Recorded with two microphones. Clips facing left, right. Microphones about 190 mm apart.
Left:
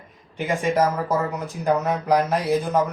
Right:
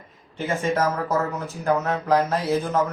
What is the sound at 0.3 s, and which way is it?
A man's voice, 15° left (ahead or behind).